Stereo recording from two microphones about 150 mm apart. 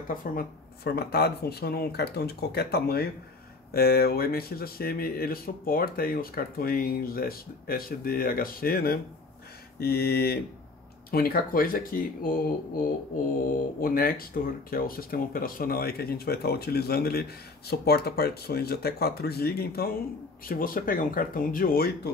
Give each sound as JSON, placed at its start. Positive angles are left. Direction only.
{"t": 0.1, "sound": "speech", "side_deg": 70}
{"t": 13.7, "sound": "speech", "side_deg": 75}
{"t": 20.4, "sound": "speech", "side_deg": 70}